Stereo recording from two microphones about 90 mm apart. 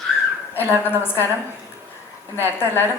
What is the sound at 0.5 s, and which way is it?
Speech, 25° left (ahead or behind).